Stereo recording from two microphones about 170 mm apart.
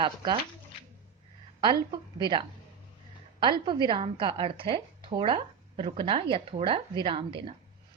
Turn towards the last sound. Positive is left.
turn(degrees=-30)  # may be behind; listen again after turning